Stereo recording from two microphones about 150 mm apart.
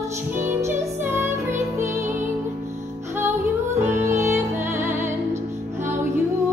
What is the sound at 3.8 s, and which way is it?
Music, 20° right (ahead or behind).